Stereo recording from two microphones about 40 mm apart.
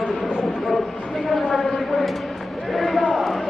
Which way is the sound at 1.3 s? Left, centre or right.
Centre.